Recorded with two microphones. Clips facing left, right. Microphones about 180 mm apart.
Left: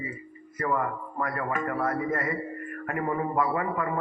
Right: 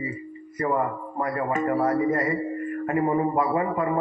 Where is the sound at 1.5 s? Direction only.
20° right (ahead or behind).